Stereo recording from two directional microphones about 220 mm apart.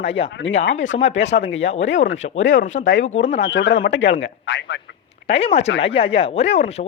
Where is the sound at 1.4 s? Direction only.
55° left (ahead or behind).